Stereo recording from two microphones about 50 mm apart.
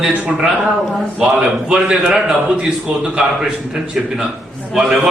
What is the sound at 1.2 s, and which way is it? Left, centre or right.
A man's voice, centre.